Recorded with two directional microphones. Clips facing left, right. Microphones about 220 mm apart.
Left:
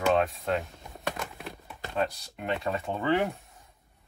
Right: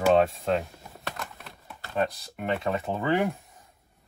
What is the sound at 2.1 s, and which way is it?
Speech, centre (ahead or behind).